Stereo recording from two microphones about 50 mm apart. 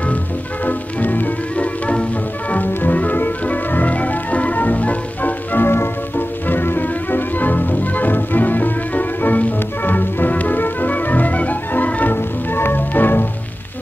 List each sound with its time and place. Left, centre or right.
0.7 s music: left
5.7 s music: left
12.2 s music: left